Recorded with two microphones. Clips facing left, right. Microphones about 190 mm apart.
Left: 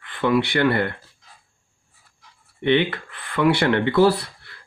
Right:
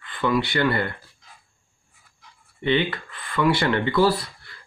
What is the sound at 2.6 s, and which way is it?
A man's voice, 65° left (ahead or behind).